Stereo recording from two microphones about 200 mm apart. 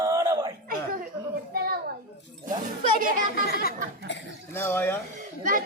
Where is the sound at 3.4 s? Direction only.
50° left (ahead or behind).